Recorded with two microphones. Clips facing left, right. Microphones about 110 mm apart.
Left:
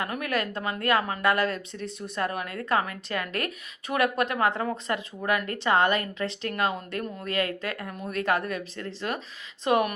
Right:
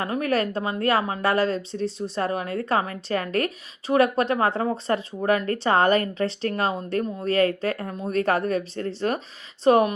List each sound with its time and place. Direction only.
0.0 s a woman's voice: 35° right (ahead or behind)